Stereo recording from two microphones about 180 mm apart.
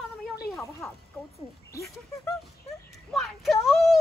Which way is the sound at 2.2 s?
Centre (ahead or behind).